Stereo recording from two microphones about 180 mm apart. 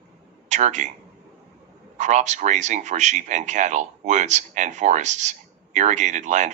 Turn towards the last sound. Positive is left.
turn(degrees=-40)  # may be behind; listen again after turning